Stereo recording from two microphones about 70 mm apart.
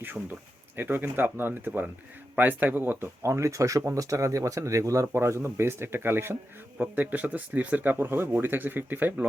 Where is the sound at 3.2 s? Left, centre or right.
Right.